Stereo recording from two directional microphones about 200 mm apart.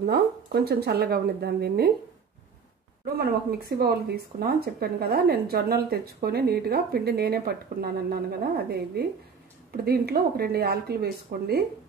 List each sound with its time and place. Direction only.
0.0 s speech: 50° right (ahead or behind)
3.2 s speech: 50° right (ahead or behind)